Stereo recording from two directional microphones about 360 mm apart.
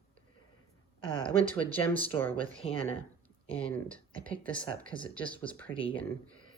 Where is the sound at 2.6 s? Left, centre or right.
Centre.